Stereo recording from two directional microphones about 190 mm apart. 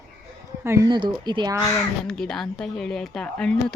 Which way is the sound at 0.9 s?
25° right (ahead or behind).